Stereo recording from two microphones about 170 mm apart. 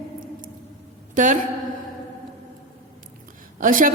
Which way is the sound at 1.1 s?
50° right (ahead or behind).